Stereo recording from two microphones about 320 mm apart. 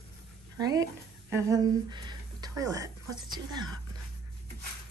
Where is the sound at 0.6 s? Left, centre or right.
Centre.